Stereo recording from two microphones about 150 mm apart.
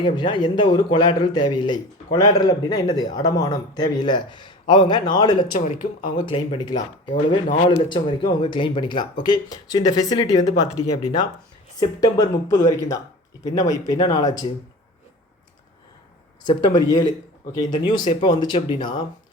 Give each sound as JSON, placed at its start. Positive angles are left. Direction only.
{"t": 0.0, "sound": "a man's voice", "side_deg": 30}
{"t": 5.5, "sound": "speech", "side_deg": 65}
{"t": 6.2, "sound": "a man's voice", "side_deg": 35}
{"t": 11.8, "sound": "a man's voice", "side_deg": 25}
{"t": 16.5, "sound": "a man's voice", "side_deg": 30}